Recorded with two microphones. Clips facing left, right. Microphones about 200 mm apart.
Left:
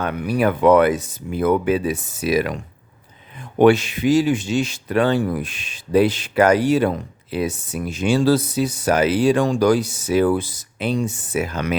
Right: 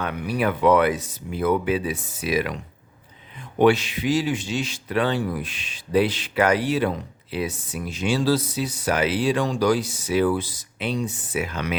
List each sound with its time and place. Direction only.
0.0 s speech: 45° left (ahead or behind)
3.6 s speech: 50° left (ahead or behind)